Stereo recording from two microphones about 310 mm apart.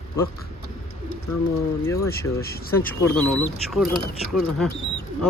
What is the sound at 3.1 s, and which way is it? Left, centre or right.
Speech, centre.